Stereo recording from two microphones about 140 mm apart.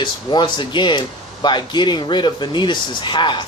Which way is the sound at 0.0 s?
35° left (ahead or behind).